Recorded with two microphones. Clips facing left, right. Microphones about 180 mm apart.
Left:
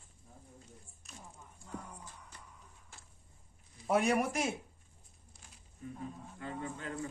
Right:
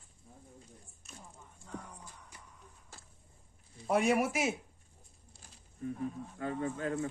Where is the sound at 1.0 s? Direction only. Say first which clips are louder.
Right 1 dB; centre (ahead or behind).